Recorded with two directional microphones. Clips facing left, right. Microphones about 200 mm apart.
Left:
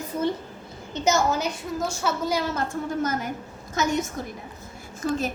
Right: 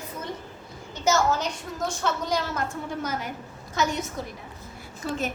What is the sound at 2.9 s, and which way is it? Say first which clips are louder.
A woman's voice: left 4 dB; 45° left (ahead or behind).